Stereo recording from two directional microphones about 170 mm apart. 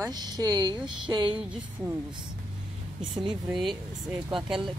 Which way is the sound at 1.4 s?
5° right (ahead or behind).